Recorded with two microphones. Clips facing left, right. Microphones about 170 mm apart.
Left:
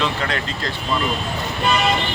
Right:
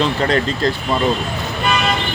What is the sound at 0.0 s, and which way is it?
Speech, 35° right (ahead or behind).